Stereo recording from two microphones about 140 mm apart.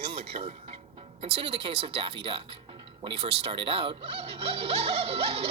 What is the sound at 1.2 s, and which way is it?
Speech, 40° right (ahead or behind).